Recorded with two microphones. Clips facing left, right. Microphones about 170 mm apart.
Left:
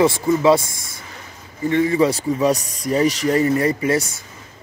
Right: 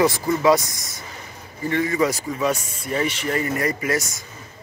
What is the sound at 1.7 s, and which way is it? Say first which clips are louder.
Speech: left 4 dB; 30° left (ahead or behind).